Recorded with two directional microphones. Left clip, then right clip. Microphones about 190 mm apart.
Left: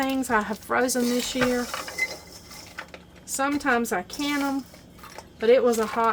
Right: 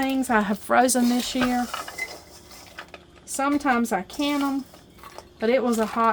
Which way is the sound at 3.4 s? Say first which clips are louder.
Right 1 dB; 35° right (ahead or behind).